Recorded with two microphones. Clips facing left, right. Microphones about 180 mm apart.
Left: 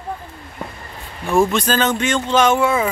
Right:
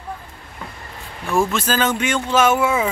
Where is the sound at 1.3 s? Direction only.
5° right (ahead or behind).